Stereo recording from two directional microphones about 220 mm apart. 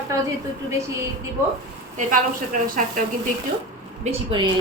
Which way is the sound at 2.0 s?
35° right (ahead or behind).